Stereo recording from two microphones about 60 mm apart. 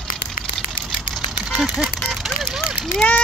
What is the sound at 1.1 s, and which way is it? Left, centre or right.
Vehicle, centre.